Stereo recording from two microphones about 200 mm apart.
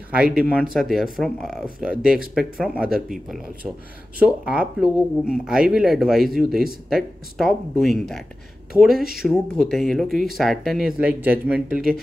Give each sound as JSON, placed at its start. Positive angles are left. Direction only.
{"t": 0.1, "sound": "speech", "side_deg": -5}